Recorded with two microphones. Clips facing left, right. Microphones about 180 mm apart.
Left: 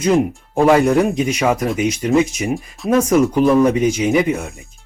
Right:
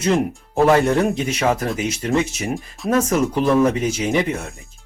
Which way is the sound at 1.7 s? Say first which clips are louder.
Left 5 dB; 30° right (ahead or behind).